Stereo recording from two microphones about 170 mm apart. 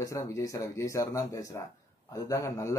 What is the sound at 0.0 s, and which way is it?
A man's voice, 20° left (ahead or behind).